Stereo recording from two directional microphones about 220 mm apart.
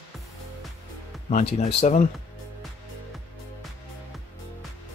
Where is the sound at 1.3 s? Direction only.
30° left (ahead or behind).